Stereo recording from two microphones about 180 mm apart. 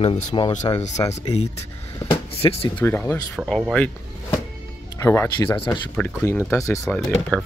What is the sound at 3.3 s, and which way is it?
Speech, centre (ahead or behind).